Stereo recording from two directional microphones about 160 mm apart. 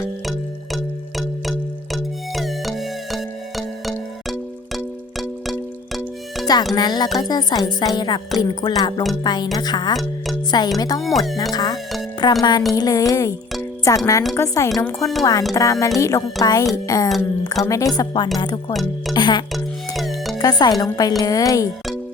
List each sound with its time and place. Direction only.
0.3 s music: centre (ahead or behind)
6.7 s music: 25° left (ahead or behind)
11.0 s speech: centre (ahead or behind)
11.5 s speech: 25° left (ahead or behind)
12.2 s music: 25° left (ahead or behind)
18.7 s speech: centre (ahead or behind)
19.1 s music: 25° left (ahead or behind)
19.5 s music: centre (ahead or behind)
20.4 s music: 25° left (ahead or behind)